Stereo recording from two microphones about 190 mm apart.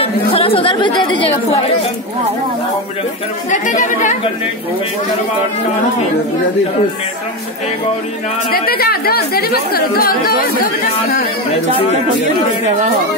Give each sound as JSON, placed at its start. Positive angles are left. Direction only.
{"t": 0.0, "sound": "a woman's voice", "side_deg": 30}
{"t": 3.4, "sound": "speech", "side_deg": 40}
{"t": 8.5, "sound": "speech", "side_deg": 50}
{"t": 12.6, "sound": "speech", "side_deg": -40}